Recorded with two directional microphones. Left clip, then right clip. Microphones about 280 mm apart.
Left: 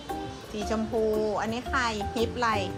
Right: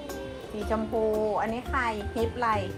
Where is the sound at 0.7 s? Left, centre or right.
Centre.